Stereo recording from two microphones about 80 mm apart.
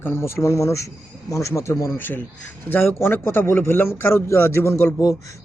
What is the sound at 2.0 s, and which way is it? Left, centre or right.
A man's voice, left.